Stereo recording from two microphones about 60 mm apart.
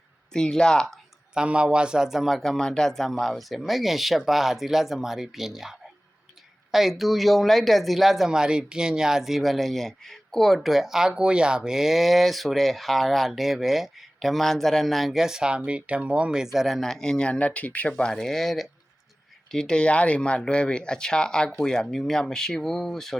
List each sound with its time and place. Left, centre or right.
0.3 s speech: centre
1.3 s speech: centre